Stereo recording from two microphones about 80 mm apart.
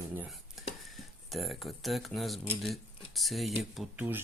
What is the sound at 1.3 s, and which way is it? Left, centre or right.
Speech, centre.